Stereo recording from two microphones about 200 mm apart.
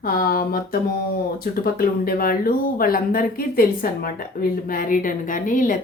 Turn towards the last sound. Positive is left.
turn(degrees=40)  # may be behind; listen again after turning